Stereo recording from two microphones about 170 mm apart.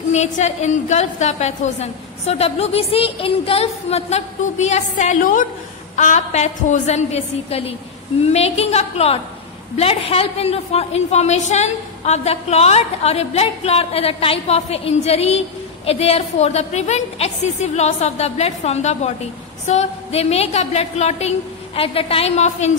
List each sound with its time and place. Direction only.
0.1 s a woman's voice: 40° left (ahead or behind)